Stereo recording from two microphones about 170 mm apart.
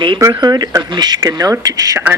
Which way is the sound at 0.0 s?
25° right (ahead or behind).